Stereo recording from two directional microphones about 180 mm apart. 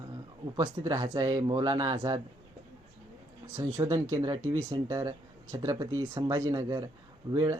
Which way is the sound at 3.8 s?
20° right (ahead or behind).